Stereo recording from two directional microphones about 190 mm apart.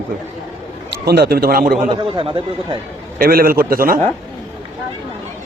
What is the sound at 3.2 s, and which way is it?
Speech, 50° right (ahead or behind).